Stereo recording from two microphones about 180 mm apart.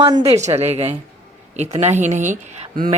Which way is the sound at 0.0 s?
30° right (ahead or behind).